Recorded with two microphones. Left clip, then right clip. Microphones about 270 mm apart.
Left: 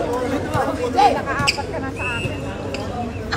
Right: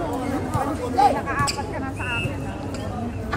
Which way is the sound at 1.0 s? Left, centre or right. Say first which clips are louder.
Left 2 dB; left.